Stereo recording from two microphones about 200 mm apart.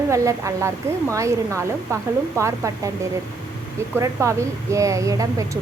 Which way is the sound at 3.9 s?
15° right (ahead or behind).